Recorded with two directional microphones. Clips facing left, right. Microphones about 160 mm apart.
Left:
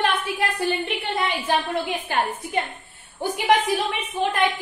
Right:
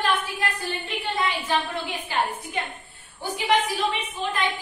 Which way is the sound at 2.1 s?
50° left (ahead or behind).